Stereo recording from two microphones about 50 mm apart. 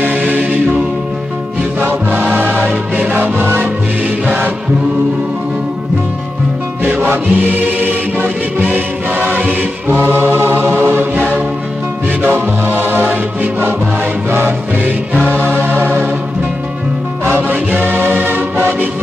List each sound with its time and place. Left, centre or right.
0.0 s music: right
2.2 s music: right
6.8 s music: right
15.3 s music: right
17.2 s music: right